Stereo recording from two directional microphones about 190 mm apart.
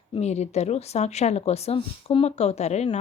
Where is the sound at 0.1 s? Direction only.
35° left (ahead or behind).